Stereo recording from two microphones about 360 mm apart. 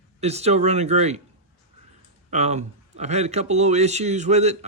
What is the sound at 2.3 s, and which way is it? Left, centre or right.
A man's voice, centre.